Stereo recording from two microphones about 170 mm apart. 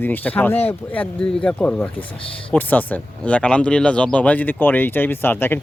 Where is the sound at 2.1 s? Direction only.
30° left (ahead or behind).